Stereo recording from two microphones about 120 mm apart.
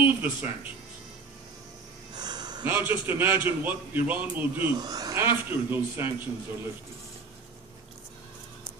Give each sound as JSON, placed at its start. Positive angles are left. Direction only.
{"t": 0.0, "sound": "speech", "side_deg": -15}
{"t": 2.1, "sound": "a sound", "side_deg": -35}
{"t": 2.6, "sound": "a man's voice", "side_deg": -20}
{"t": 4.7, "sound": "speech", "side_deg": -35}
{"t": 5.2, "sound": "a man's voice", "side_deg": -15}